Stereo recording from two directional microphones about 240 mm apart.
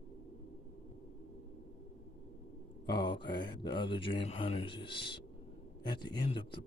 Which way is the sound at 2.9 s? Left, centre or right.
Centre.